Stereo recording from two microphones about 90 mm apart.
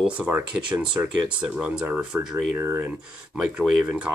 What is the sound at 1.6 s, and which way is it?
Speech, 10° right (ahead or behind).